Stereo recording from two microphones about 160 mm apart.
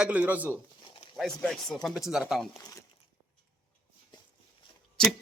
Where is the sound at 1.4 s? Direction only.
5° left (ahead or behind).